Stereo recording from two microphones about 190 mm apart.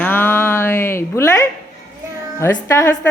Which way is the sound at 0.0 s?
10° left (ahead or behind).